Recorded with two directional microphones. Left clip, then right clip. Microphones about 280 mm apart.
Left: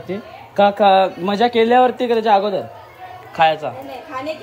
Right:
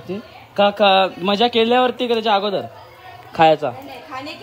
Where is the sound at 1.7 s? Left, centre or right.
Centre.